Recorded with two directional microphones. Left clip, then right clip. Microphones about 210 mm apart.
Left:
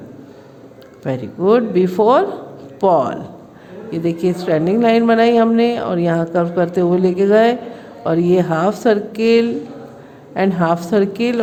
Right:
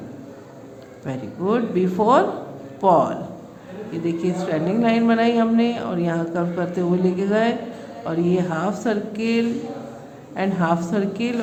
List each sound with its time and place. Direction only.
1.0 s a woman's voice: 40° left (ahead or behind)